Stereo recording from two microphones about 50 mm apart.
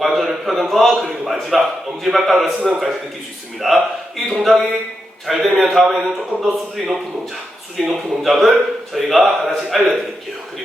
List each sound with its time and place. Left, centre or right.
0.0 s a sound: centre
2.0 s a man's voice: centre
3.6 s a man's voice: centre